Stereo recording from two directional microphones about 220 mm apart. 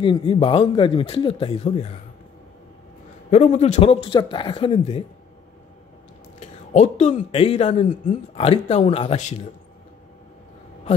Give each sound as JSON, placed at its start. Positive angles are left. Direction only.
{"t": 0.0, "sound": "speech", "side_deg": 20}
{"t": 3.3, "sound": "speech", "side_deg": 30}
{"t": 6.7, "sound": "speech", "side_deg": 30}